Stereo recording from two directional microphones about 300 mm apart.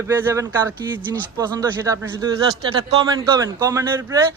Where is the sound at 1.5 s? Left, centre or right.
Centre.